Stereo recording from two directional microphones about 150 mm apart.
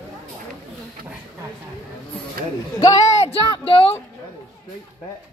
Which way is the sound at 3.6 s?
35° left (ahead or behind).